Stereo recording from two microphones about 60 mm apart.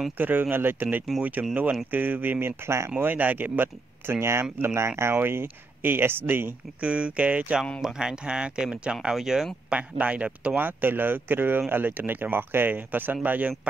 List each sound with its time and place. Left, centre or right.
0.2 s speech: right
2.6 s speech: right
3.0 s speech: right
6.8 s speech: centre
9.8 s speech: right
10.6 s speech: right